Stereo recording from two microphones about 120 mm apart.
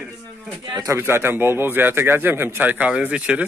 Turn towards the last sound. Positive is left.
turn(degrees=-10)  # may be behind; listen again after turning